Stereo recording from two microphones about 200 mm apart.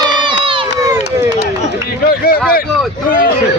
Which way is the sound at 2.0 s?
50° left (ahead or behind).